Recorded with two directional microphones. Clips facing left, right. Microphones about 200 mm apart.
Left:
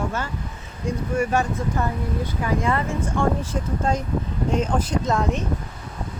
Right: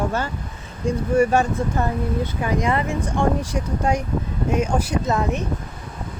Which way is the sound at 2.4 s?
15° right (ahead or behind).